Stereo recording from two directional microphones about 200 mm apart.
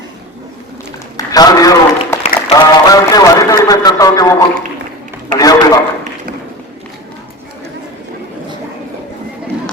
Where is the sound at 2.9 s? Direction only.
15° left (ahead or behind).